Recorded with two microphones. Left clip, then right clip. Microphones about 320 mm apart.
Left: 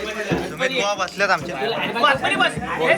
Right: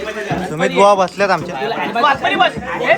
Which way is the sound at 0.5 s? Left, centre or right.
Centre.